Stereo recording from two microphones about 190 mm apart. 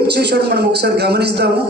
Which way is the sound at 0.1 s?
60° right (ahead or behind).